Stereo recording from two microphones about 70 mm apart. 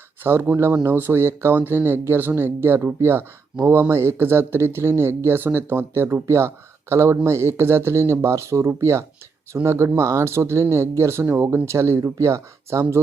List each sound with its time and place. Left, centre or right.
0.2 s speech: right
12.0 s speech: right